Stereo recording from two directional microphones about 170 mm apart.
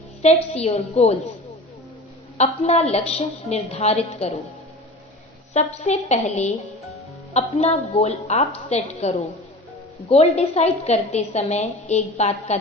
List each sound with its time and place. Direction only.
0.2 s a woman's voice: 40° left (ahead or behind)
2.4 s a woman's voice: 40° left (ahead or behind)
5.5 s a woman's voice: 40° left (ahead or behind)